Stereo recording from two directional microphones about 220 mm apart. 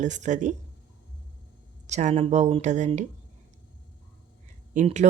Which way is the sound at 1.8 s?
30° right (ahead or behind).